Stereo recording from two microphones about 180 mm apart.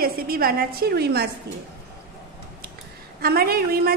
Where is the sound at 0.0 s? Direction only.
55° right (ahead or behind).